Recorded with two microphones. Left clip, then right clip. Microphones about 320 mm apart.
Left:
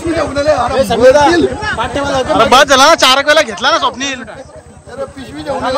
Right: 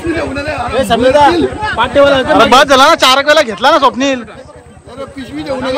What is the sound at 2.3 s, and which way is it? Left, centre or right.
Speech, centre.